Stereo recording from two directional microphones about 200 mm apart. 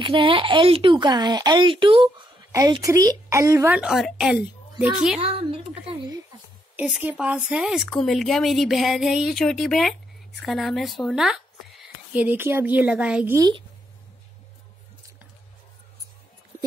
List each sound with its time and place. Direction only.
0.0 s a woman's voice: 25° right (ahead or behind); by 5.2 s 5° right (ahead or behind)
5.2 s a sound: 30° right (ahead or behind)
6.8 s speech: 10° right (ahead or behind)
13.4 s speech: 20° right (ahead or behind)